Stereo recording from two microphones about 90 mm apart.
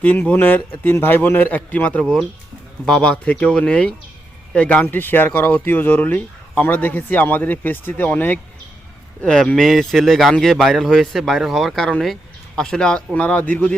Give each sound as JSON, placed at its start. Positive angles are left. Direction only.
{"t": 0.0, "sound": "speech", "side_deg": 15}
{"t": 9.2, "sound": "speech", "side_deg": 10}